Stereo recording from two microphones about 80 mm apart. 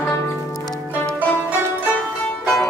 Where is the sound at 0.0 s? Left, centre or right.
Left.